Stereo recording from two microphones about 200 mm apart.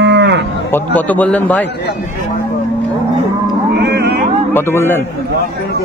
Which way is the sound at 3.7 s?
55° right (ahead or behind).